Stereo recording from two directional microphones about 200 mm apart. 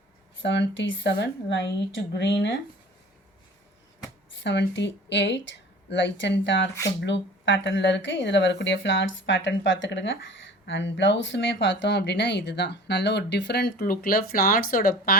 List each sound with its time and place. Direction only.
0.4 s speech: 65° left (ahead or behind)
4.3 s speech: 65° left (ahead or behind); by 15.2 s 50° left (ahead or behind)